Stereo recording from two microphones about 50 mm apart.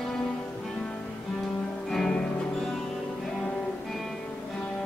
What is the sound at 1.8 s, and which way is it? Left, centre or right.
Music, centre.